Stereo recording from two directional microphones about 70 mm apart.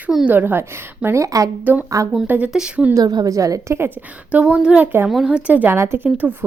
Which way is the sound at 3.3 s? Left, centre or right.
Right.